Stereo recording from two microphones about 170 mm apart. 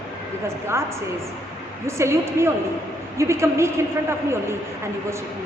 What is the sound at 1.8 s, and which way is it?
A woman's voice, 15° right (ahead or behind).